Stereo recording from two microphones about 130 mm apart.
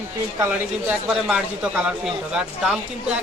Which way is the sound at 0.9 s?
5° right (ahead or behind).